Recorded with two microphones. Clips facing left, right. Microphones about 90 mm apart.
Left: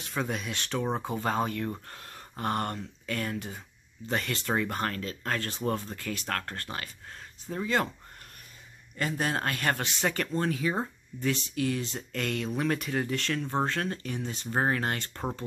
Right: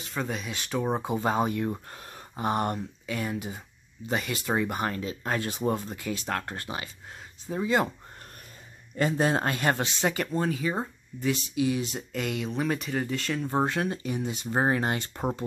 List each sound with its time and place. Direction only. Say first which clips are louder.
0.0 s speech: even; centre (ahead or behind)
8.9 s speech: right 5 dB; 20° right (ahead or behind)
10.1 s speech: right 1 dB; 10° right (ahead or behind)
11.3 s speech: right 3 dB; 15° right (ahead or behind)